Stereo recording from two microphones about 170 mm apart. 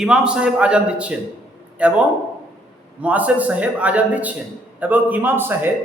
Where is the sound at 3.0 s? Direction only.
10° right (ahead or behind).